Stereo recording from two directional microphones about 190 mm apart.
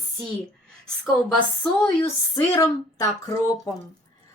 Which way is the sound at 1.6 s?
5° left (ahead or behind).